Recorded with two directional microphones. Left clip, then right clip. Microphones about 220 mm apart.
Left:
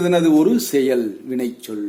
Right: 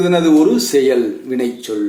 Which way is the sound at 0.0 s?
45° left (ahead or behind).